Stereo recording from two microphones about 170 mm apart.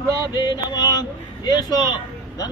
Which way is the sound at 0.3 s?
25° left (ahead or behind).